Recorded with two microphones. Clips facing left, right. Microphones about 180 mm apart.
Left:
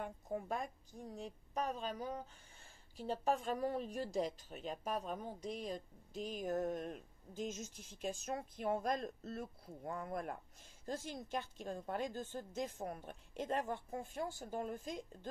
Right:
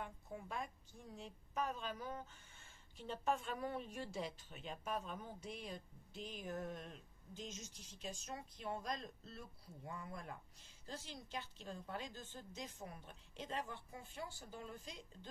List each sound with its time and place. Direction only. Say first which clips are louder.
0.0 s a woman's voice: left 7 dB; 40° left (ahead or behind)